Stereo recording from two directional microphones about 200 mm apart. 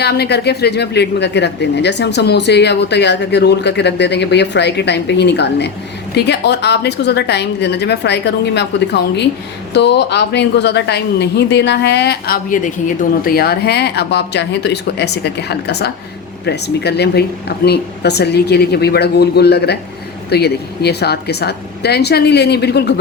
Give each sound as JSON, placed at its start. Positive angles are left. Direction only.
{"t": 0.0, "sound": "a woman's voice", "side_deg": 55}